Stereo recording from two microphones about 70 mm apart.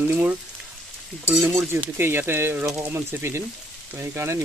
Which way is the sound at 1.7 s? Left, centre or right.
Right.